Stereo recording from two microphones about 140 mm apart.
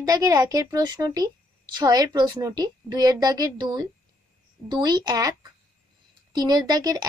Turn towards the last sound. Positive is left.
turn(degrees=-30)  # may be behind; listen again after turning